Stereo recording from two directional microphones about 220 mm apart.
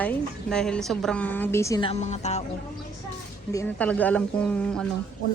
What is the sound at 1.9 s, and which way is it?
Speech, 30° left (ahead or behind).